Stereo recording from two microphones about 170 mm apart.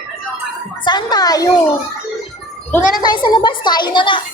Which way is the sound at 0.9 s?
25° left (ahead or behind).